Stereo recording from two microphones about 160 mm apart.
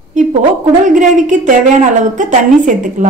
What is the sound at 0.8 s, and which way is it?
A woman's voice, 50° right (ahead or behind).